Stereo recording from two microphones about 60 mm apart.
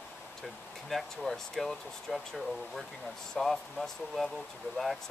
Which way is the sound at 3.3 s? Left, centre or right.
Centre.